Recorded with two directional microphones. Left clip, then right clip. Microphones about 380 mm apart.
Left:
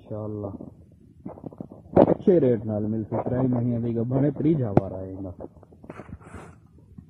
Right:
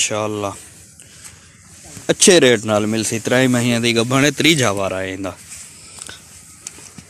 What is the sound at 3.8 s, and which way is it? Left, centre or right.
Speech, right.